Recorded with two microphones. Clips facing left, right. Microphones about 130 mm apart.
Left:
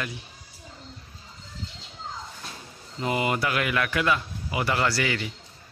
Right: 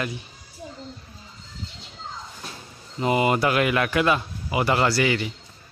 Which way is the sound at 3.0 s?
20° right (ahead or behind).